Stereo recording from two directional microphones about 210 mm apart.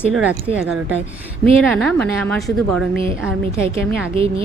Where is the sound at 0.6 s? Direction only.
5° right (ahead or behind).